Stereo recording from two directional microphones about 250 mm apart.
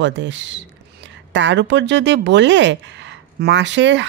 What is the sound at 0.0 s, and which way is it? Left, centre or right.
Speech, right.